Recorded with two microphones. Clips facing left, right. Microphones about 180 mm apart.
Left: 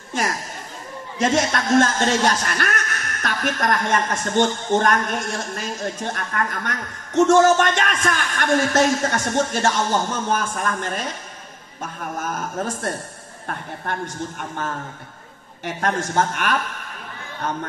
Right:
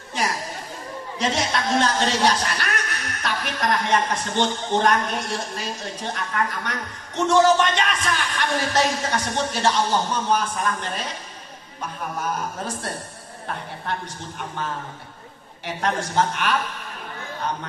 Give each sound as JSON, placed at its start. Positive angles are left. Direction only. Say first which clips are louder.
{"t": 0.2, "sound": "a sound", "louder": "left 2 dB", "side_deg": 50}
{"t": 1.1, "sound": "a man's voice", "louder": "left 4 dB", "side_deg": 45}
{"t": 12.2, "sound": "a man's voice", "louder": "left 2 dB", "side_deg": 45}
{"t": 15.6, "sound": "a man's voice", "louder": "left 2 dB", "side_deg": 50}